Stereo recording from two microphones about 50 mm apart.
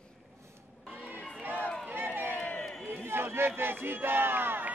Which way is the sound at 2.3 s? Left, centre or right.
Left.